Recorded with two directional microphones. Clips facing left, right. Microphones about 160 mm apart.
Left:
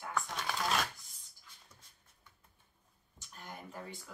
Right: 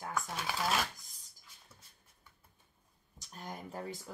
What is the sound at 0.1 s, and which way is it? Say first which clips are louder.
Shuffling cards: left 1 dB; 5° right (ahead or behind).